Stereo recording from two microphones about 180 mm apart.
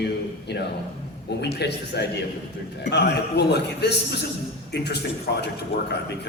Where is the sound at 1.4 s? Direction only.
70° left (ahead or behind).